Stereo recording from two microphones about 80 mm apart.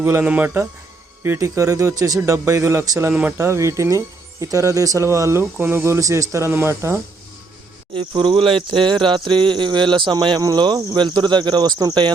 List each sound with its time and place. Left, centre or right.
0.0 s speech: right
7.9 s a sound: right
10.9 s speech: right